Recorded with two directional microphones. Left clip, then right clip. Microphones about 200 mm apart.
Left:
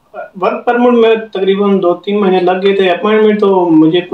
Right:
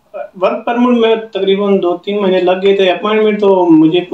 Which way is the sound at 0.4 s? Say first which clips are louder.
Left 2 dB; 5° left (ahead or behind).